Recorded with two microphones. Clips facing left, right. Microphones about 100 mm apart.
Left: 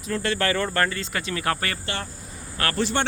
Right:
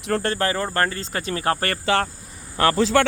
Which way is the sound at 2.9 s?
90° right.